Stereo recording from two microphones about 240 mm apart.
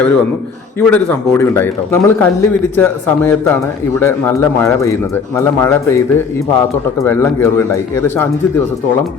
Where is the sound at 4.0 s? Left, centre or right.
Centre.